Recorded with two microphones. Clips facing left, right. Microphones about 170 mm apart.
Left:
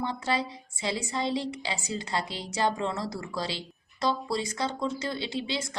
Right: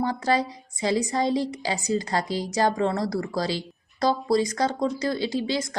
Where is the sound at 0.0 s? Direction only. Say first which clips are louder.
Right 6 dB; 40° right (ahead or behind).